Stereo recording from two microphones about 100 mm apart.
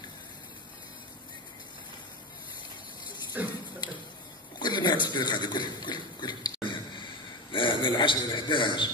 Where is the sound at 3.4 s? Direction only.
15° right (ahead or behind).